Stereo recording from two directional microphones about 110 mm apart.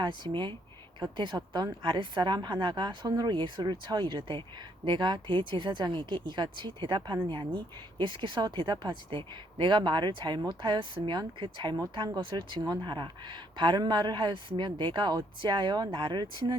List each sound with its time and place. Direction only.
0.0 s speech: 45° right (ahead or behind)